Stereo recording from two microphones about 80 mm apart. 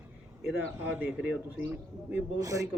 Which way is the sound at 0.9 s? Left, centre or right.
Centre.